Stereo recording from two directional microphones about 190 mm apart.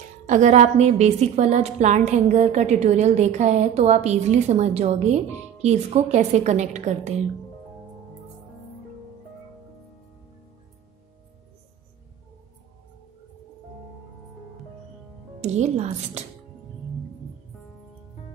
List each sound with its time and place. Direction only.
0.3 s a woman's voice: 40° right (ahead or behind)
15.4 s a woman's voice: 35° right (ahead or behind)